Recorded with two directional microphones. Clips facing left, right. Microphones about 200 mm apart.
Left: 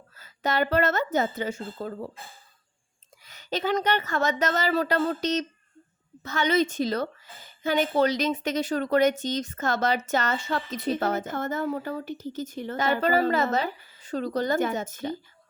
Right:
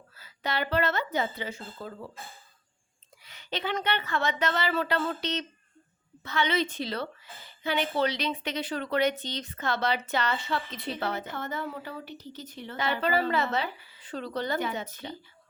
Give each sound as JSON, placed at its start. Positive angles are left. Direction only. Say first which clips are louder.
{"t": 0.2, "sound": "a woman's voice", "louder": "left 6 dB", "side_deg": 45}
{"t": 3.2, "sound": "a woman's voice", "louder": "left 6 dB", "side_deg": 40}